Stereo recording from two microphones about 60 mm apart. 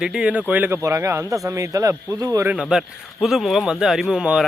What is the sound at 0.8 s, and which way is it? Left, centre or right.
Speech, right.